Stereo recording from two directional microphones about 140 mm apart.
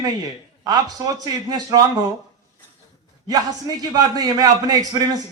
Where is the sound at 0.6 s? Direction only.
25° right (ahead or behind).